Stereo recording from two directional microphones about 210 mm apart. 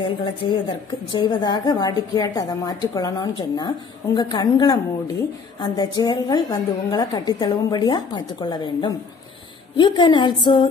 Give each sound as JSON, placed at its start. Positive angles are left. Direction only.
{"t": 0.2, "sound": "a woman's voice", "side_deg": 25}